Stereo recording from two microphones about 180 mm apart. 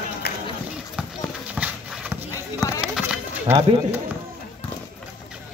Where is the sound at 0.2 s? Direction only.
60° left (ahead or behind).